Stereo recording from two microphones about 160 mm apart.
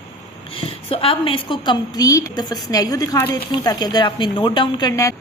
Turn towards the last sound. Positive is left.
turn(degrees=20)  # may be behind; listen again after turning